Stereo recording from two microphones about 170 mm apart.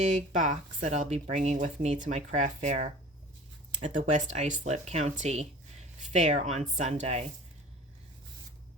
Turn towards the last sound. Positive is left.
turn(degrees=-40)  # may be behind; listen again after turning